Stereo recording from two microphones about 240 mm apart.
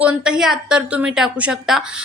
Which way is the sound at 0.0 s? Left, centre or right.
Centre.